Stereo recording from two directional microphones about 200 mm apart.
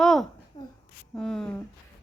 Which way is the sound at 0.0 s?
Centre (ahead or behind).